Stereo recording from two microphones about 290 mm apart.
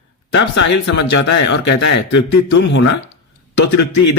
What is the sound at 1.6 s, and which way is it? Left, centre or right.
Speech, left.